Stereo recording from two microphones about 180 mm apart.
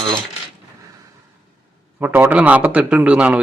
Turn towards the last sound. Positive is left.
turn(degrees=-5)  # may be behind; listen again after turning